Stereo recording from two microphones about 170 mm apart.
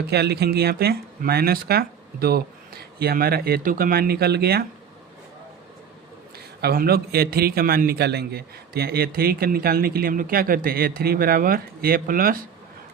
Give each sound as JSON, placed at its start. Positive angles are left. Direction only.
{"t": 0.1, "sound": "a man's voice", "side_deg": -70}
{"t": 6.6, "sound": "a man's voice", "side_deg": -65}